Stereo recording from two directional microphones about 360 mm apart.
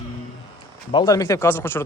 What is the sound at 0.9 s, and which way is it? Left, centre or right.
Speech, centre.